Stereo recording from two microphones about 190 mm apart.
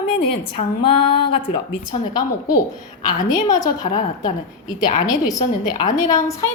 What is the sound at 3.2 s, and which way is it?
Speech, 20° left (ahead or behind).